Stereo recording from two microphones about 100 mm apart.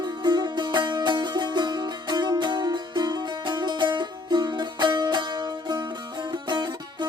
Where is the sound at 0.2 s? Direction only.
45° right (ahead or behind).